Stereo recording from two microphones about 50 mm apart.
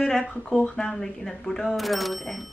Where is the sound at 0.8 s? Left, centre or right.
Centre.